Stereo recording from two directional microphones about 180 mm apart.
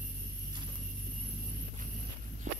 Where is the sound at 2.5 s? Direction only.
45° right (ahead or behind).